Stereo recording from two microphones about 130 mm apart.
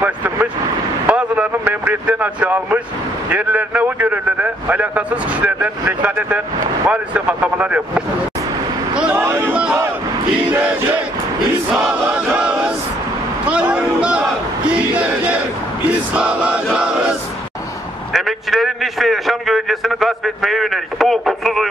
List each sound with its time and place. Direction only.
0.0 s vehicle: 15° right (ahead or behind)
1.0 s a man's voice: 10° right (ahead or behind)
8.9 s a sound: 10° right (ahead or behind)
9.2 s music: 20° right (ahead or behind)
10.5 s a man's voice: 15° right (ahead or behind)
11.7 s choir: 10° right (ahead or behind)
13.5 s crowd: 10° right (ahead or behind)
15.9 s a man's voice: 10° right (ahead or behind)
18.1 s a man's voice: centre (ahead or behind)